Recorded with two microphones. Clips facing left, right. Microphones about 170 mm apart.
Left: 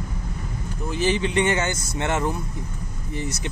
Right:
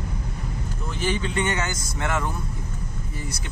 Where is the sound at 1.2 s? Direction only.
20° left (ahead or behind).